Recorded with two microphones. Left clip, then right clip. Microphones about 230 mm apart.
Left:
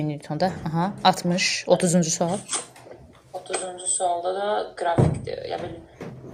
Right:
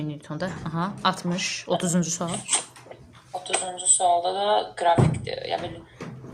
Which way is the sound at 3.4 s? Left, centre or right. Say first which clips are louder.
Right 4 dB; right.